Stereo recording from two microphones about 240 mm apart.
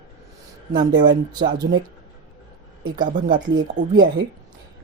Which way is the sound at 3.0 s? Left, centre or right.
Right.